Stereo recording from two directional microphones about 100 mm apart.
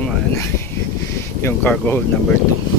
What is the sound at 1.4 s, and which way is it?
Speech, 20° left (ahead or behind).